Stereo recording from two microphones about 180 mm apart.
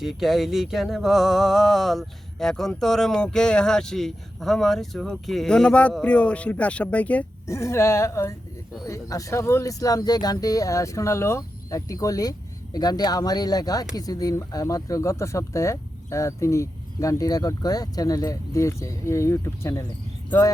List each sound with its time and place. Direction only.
0.0 s speech: centre (ahead or behind); by 19.9 s 15° left (ahead or behind)